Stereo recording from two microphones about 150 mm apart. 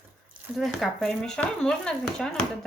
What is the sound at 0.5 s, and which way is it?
A woman's voice, centre (ahead or behind).